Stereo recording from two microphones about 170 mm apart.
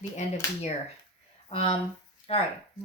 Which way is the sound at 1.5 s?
35° left (ahead or behind).